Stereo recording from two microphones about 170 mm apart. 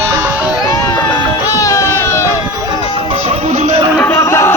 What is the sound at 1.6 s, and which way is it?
Music, 20° left (ahead or behind).